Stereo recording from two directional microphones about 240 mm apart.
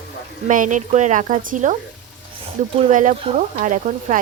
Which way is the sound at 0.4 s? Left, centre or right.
Right.